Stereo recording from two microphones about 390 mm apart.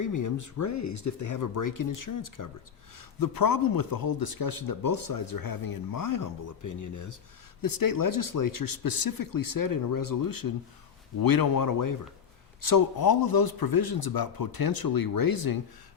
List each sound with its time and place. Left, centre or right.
0.0 s speech: left